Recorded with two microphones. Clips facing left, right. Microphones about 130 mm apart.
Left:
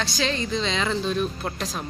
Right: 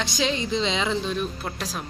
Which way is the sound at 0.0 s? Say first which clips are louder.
Right 1 dB; 20° right (ahead or behind).